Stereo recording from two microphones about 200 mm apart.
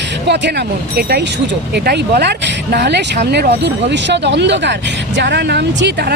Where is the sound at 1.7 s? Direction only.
55° right (ahead or behind).